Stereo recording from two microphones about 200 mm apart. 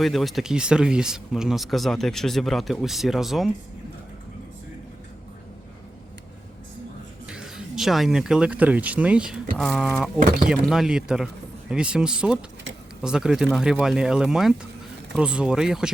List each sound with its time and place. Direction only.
0.0 s speech: centre (ahead or behind)
7.3 s speech: 5° right (ahead or behind)